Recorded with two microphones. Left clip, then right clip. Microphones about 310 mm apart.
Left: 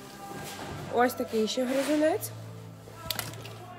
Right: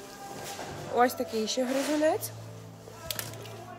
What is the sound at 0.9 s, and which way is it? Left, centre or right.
Speech, centre.